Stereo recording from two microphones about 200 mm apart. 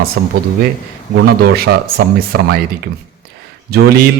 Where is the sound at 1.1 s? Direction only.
50° right (ahead or behind).